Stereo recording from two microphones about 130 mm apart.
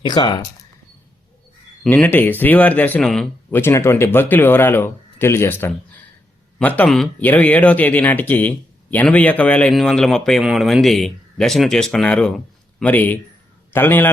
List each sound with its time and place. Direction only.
0.0 s speech: 35° left (ahead or behind)
1.9 s speech: 15° left (ahead or behind)
3.5 s speech: 20° left (ahead or behind)